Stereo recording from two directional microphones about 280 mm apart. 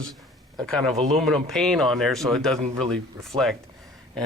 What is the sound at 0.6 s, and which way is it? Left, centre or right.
Speech, centre.